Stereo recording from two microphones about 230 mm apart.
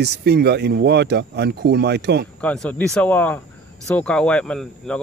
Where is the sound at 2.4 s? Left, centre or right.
Centre.